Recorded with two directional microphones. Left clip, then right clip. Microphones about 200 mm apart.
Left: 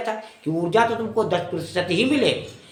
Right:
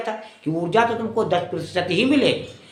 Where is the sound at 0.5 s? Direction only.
20° right (ahead or behind).